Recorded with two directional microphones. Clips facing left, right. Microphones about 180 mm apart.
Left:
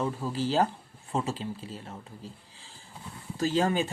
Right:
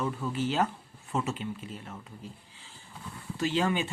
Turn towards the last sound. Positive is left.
turn(degrees=40)  # may be behind; listen again after turning